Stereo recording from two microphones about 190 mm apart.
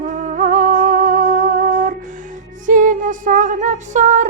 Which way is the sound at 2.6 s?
45° right (ahead or behind).